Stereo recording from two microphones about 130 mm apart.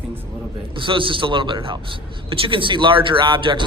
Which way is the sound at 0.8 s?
40° right (ahead or behind).